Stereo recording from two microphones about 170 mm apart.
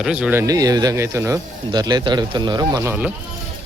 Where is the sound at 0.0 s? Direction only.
5° right (ahead or behind); by 2.9 s 20° right (ahead or behind).